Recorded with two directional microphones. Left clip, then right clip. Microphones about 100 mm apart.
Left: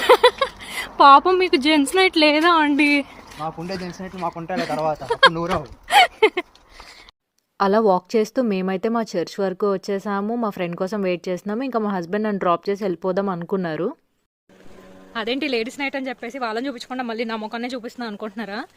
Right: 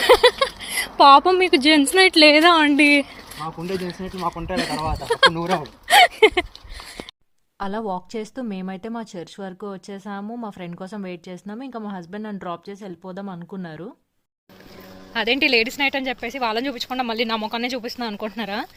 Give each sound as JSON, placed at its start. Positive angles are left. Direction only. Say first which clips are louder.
{"t": 0.0, "sound": "speech", "louder": "even", "side_deg": 5}
{"t": 2.7, "sound": "speech", "louder": "right 3 dB", "side_deg": 10}
{"t": 4.0, "sound": "speech", "louder": "right 1 dB", "side_deg": 40}
{"t": 4.5, "sound": "speech", "louder": "left 5 dB", "side_deg": 0}
{"t": 7.6, "sound": "speech", "louder": "left 10 dB", "side_deg": 40}
{"t": 15.1, "sound": "speech", "louder": "right 5 dB", "side_deg": 35}